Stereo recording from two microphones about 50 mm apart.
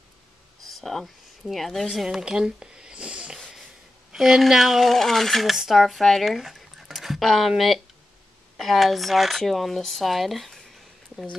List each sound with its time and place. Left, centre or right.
0.7 s speech: centre
2.0 s sniff: centre
4.1 s speech: centre